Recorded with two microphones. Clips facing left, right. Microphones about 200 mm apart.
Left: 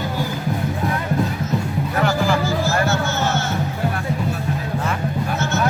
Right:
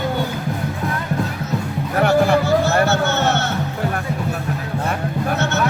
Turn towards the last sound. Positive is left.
turn(degrees=-65)  # may be behind; listen again after turning